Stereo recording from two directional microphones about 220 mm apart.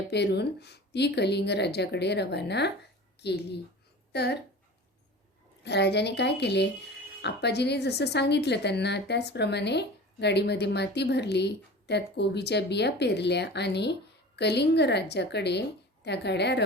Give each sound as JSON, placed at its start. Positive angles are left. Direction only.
{"t": 0.1, "sound": "a woman's voice", "side_deg": 50}
{"t": 5.6, "sound": "a woman's voice", "side_deg": 50}